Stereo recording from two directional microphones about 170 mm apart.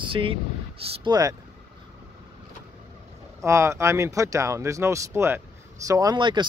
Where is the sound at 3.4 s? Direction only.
15° right (ahead or behind).